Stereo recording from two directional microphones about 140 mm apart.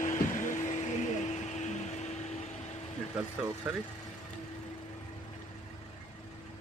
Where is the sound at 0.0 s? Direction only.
65° left (ahead or behind).